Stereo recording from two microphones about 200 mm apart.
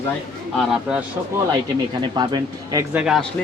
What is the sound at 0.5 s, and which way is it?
Speech, 5° right (ahead or behind).